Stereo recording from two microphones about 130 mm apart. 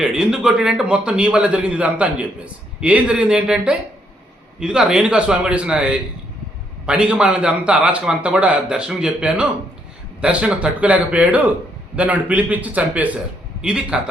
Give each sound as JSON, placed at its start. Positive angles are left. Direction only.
{"t": 0.0, "sound": "a man's voice", "side_deg": -5}